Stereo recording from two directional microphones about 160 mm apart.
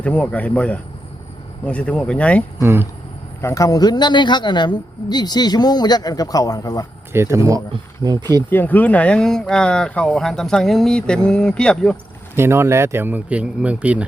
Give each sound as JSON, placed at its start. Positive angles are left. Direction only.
{"t": 0.0, "sound": "a man's voice", "side_deg": 10}
{"t": 2.6, "sound": "speech", "side_deg": -15}
{"t": 3.4, "sound": "a woman's voice", "side_deg": 20}
{"t": 7.1, "sound": "speech", "side_deg": -15}
{"t": 8.4, "sound": "speech", "side_deg": 10}
{"t": 12.4, "sound": "speech", "side_deg": -15}